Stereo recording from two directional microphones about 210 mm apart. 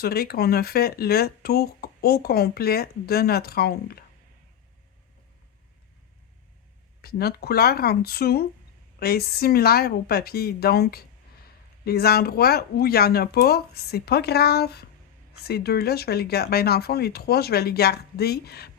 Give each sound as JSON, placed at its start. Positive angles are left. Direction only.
{"t": 0.0, "sound": "speech", "side_deg": 45}
{"t": 7.0, "sound": "speech", "side_deg": 45}